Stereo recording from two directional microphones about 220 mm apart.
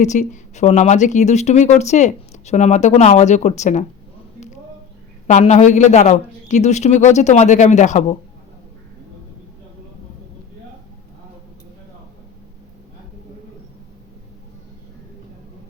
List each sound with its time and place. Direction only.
0.0 s speech: 35° left (ahead or behind)
5.3 s speech: 30° left (ahead or behind)